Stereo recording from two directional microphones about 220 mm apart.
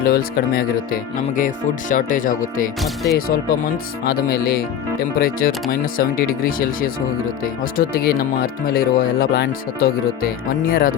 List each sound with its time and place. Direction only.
0.0 s speech: 40° left (ahead or behind)
2.8 s speech: centre (ahead or behind)
4.0 s speech: 45° left (ahead or behind)